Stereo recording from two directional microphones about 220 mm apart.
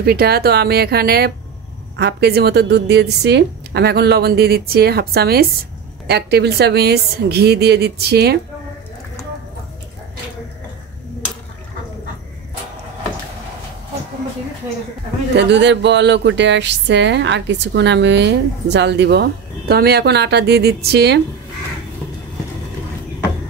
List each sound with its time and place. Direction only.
0.0 s speech: 45° right (ahead or behind)
15.3 s speech: 55° right (ahead or behind)